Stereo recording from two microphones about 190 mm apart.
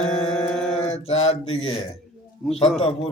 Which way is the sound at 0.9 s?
35° left (ahead or behind).